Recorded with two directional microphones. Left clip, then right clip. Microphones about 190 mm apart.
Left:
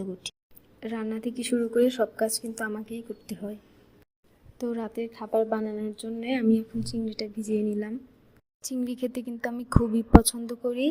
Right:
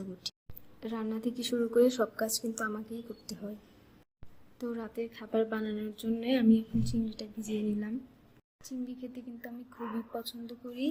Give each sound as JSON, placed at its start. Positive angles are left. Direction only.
{"t": 0.8, "sound": "a woman's voice", "side_deg": 10}
{"t": 4.5, "sound": "a woman's voice", "side_deg": 20}
{"t": 8.6, "sound": "a woman's voice", "side_deg": 65}